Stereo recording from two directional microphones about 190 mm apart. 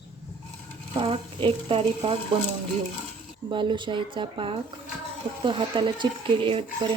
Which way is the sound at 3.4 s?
25° right (ahead or behind).